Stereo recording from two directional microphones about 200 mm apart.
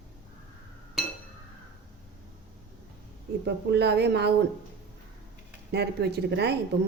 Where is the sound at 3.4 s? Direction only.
55° right (ahead or behind).